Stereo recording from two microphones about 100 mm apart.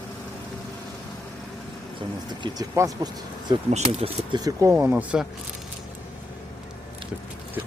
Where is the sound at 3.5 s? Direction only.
50° right (ahead or behind).